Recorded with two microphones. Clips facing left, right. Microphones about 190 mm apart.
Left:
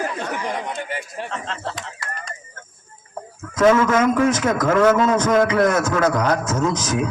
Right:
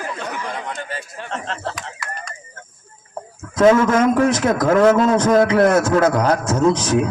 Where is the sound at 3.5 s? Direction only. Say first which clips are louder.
Right 2 dB; 30° right (ahead or behind).